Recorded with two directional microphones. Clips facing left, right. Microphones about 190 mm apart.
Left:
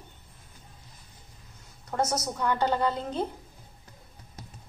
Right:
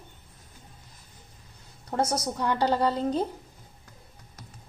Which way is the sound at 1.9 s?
30° right (ahead or behind).